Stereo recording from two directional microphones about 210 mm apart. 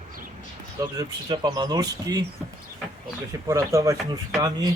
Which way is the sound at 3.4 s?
15° right (ahead or behind).